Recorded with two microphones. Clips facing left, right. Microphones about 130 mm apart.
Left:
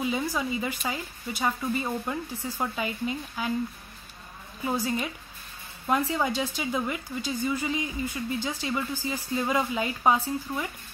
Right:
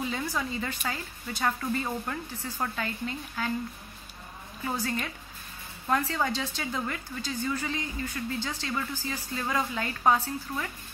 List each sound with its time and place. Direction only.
0.0 s a woman's voice: 15° left (ahead or behind)
4.6 s a woman's voice: 15° left (ahead or behind)